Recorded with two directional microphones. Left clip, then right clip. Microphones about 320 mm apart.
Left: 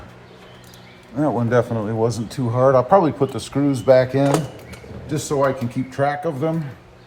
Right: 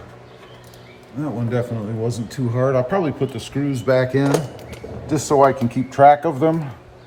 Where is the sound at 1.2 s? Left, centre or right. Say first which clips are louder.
Left 7 dB; centre.